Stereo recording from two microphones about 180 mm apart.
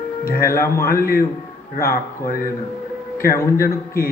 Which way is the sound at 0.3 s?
55° left (ahead or behind).